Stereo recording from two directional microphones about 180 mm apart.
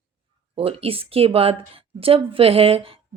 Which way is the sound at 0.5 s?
30° right (ahead or behind).